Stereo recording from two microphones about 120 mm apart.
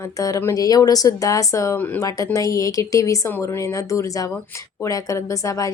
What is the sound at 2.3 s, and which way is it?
A woman's voice, 30° left (ahead or behind).